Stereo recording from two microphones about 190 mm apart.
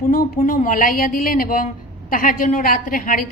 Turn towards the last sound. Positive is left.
turn(degrees=45)  # may be behind; listen again after turning